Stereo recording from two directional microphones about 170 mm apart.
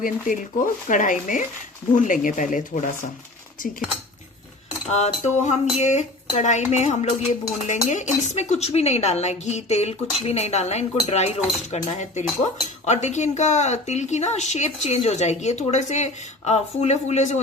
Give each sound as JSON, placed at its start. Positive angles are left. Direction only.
{"t": 0.0, "sound": "speech", "side_deg": 50}
{"t": 4.9, "sound": "speech", "side_deg": 40}